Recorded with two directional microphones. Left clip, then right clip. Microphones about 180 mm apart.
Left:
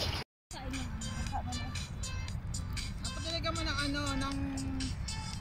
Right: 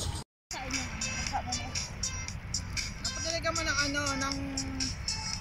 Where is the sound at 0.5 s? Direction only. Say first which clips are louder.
Right 7 dB; 15° left (ahead or behind).